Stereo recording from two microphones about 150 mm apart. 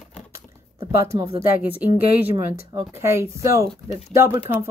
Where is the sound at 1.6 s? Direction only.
10° right (ahead or behind).